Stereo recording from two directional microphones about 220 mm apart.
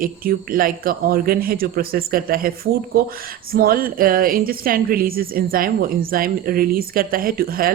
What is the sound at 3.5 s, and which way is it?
A woman's voice, 40° right (ahead or behind).